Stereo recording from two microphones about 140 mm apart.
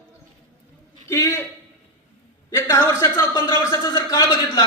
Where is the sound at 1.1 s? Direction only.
20° left (ahead or behind).